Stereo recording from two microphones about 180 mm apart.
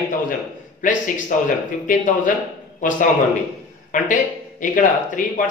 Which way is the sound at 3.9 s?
45° left (ahead or behind).